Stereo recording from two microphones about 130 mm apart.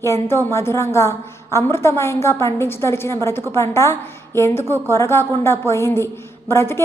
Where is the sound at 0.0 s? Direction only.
20° left (ahead or behind).